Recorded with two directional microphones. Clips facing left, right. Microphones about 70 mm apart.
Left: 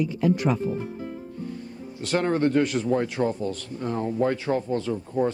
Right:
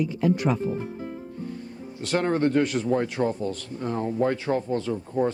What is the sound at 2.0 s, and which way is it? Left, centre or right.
Speech, right.